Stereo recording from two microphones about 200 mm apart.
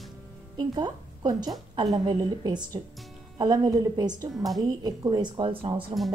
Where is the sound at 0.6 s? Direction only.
20° right (ahead or behind).